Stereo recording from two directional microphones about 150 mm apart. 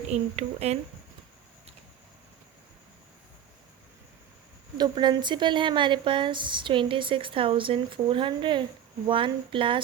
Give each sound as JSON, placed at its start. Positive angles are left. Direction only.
{"t": 0.1, "sound": "speech", "side_deg": -45}
{"t": 4.8, "sound": "a woman's voice", "side_deg": -30}